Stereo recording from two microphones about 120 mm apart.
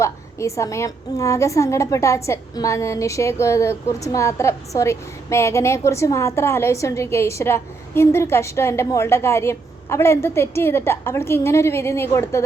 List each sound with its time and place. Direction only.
0.0 s a woman's voice: 25° left (ahead or behind)